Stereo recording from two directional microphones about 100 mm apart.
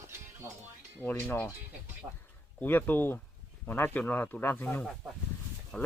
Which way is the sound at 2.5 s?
20° left (ahead or behind).